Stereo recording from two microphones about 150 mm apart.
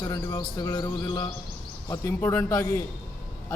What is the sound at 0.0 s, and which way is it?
A man's voice, 25° left (ahead or behind).